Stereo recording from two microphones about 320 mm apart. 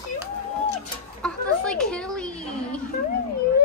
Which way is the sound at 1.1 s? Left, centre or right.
Centre.